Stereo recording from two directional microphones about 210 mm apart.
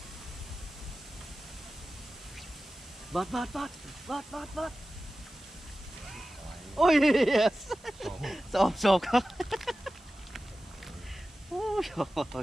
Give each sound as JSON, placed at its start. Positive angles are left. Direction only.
{"t": 3.1, "sound": "speech", "side_deg": 0}
{"t": 6.7, "sound": "a sound", "side_deg": 0}
{"t": 11.6, "sound": "speech", "side_deg": 0}